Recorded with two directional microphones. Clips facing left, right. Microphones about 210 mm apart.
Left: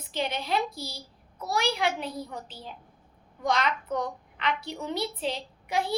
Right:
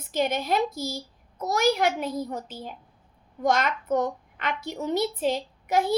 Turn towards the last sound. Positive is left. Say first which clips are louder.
# right 5 dB
turn(degrees=-45)  # may be behind; listen again after turning